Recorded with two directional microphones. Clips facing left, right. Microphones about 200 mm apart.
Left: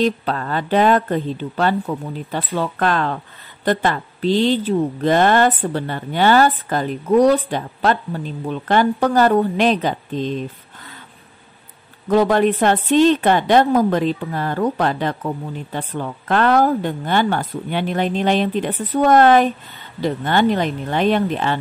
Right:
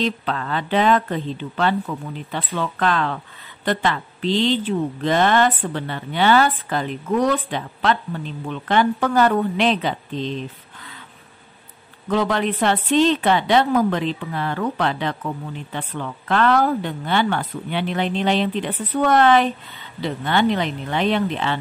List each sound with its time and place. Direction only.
0.0 s speech: 40° left (ahead or behind)
12.1 s speech: 45° left (ahead or behind)